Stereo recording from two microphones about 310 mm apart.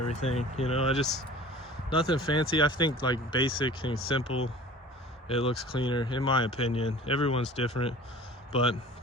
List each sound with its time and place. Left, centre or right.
0.1 s speech: left